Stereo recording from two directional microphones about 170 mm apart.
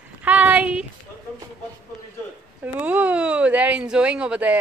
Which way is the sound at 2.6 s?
10° right (ahead or behind).